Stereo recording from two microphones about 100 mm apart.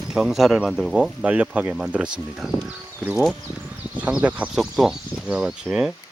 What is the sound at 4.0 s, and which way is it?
Speech, 15° right (ahead or behind).